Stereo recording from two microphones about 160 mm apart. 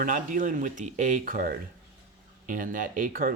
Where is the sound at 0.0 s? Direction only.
55° right (ahead or behind).